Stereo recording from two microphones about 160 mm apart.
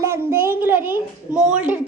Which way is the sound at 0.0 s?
15° right (ahead or behind).